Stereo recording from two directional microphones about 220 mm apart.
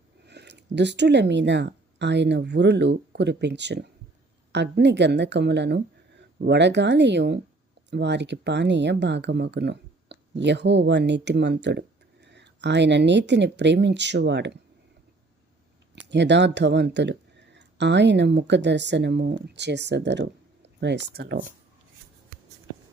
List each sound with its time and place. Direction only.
0.3 s speech: 50° right (ahead or behind)
16.0 s speech: 55° right (ahead or behind)